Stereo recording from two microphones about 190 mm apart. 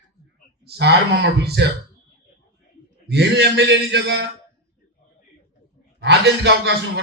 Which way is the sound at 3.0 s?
60° right (ahead or behind).